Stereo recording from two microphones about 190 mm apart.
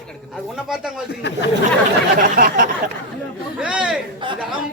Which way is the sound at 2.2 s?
45° right (ahead or behind).